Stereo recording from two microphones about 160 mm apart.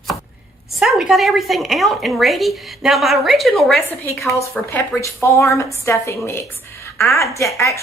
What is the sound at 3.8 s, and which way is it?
A woman's voice, 15° left (ahead or behind).